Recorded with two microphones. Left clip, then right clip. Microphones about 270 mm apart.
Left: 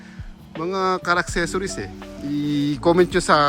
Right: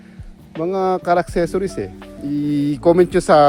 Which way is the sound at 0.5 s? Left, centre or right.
Centre.